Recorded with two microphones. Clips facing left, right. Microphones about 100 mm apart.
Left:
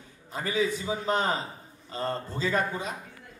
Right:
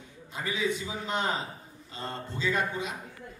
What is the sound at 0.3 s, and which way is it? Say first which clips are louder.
A man's voice: left 3 dB; 40° left (ahead or behind).